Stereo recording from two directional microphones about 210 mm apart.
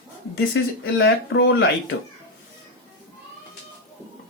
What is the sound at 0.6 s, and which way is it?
Speech, 60° left (ahead or behind).